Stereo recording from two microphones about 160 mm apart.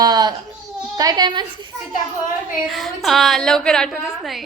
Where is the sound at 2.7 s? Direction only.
Centre (ahead or behind).